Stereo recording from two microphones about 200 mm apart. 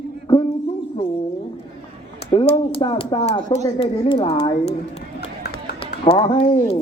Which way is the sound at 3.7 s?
25° left (ahead or behind).